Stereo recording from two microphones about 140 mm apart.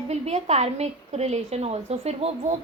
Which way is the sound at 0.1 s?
50° right (ahead or behind).